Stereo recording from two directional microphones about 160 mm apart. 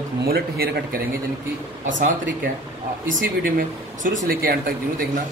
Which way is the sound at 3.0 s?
60° right (ahead or behind).